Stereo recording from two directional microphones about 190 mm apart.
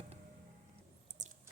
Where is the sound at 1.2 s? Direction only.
40° right (ahead or behind).